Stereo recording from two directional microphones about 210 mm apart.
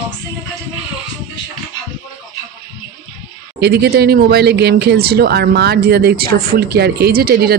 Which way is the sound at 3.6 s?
50° right (ahead or behind).